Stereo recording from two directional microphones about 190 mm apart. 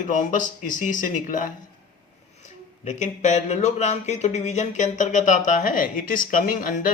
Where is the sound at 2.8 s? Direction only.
40° left (ahead or behind).